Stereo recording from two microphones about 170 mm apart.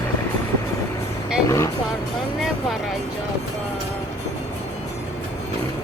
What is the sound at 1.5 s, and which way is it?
Speech, 15° left (ahead or behind).